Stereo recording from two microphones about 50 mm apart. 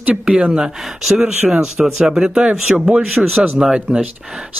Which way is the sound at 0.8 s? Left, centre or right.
Centre.